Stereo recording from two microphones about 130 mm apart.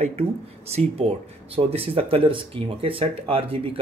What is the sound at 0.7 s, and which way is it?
A man's voice, 55° right (ahead or behind).